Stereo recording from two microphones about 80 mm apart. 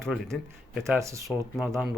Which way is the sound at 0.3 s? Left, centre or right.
Centre.